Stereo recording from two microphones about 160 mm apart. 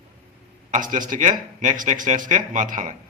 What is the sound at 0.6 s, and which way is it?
A man's voice, 55° right (ahead or behind).